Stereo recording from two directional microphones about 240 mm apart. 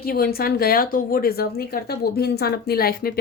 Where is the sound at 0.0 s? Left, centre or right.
Left.